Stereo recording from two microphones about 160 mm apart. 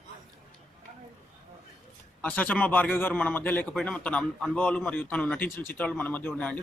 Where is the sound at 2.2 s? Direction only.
10° left (ahead or behind).